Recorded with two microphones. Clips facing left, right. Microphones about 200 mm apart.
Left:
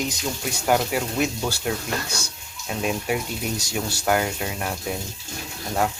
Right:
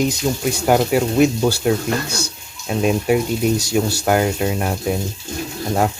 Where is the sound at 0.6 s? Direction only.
40° right (ahead or behind).